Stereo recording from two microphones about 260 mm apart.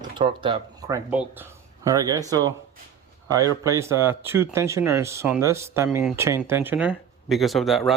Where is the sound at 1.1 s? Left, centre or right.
Centre.